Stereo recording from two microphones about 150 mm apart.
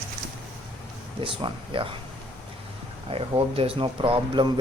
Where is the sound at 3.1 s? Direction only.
40° right (ahead or behind).